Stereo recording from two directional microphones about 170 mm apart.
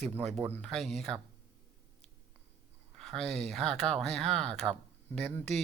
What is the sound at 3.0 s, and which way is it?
Speech, 5° left (ahead or behind).